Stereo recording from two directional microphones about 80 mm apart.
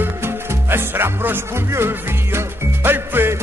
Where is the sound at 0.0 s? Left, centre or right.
Right.